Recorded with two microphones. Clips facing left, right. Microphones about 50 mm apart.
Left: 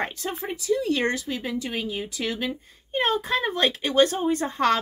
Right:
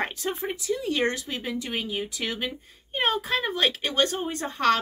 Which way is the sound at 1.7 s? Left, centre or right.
Right.